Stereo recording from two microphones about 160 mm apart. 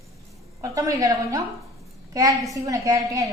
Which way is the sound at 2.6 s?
20° right (ahead or behind).